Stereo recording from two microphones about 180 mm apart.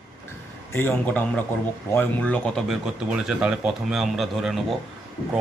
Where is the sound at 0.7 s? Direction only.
10° left (ahead or behind).